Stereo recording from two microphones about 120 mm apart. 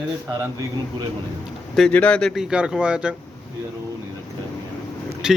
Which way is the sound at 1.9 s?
10° left (ahead or behind).